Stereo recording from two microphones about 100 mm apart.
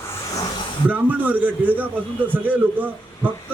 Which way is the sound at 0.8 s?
15° right (ahead or behind).